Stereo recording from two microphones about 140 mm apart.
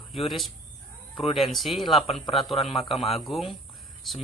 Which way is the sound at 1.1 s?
40° left (ahead or behind).